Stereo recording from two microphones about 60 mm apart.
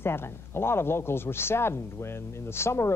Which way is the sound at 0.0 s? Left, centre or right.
Left.